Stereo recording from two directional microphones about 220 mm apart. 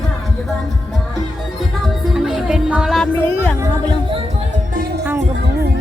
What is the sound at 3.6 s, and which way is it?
Music, 20° right (ahead or behind).